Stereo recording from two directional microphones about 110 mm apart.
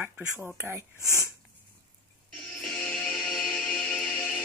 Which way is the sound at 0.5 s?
20° right (ahead or behind).